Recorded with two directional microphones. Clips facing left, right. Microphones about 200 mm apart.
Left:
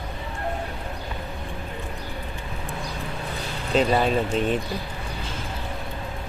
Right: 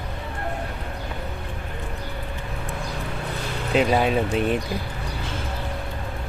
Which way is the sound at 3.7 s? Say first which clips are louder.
Right 1 dB; 5° right (ahead or behind).